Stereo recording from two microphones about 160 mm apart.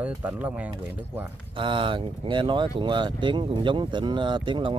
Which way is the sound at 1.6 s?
30° right (ahead or behind).